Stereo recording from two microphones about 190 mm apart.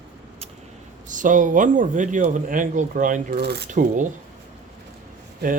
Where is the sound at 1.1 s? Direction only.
40° right (ahead or behind).